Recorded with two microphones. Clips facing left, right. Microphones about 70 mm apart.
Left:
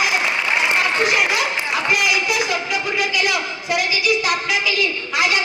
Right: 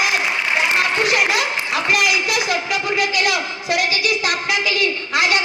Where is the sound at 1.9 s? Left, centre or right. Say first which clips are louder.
Right 2 dB; right.